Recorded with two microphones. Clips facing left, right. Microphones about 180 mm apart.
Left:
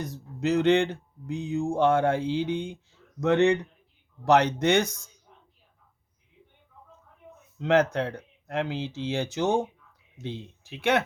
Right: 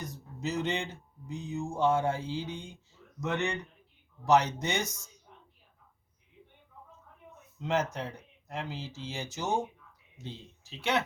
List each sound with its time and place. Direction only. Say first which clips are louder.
0.3 s speech: left 11 dB; 65° left (ahead or behind)
7.6 s speech: left 8 dB; 65° left (ahead or behind)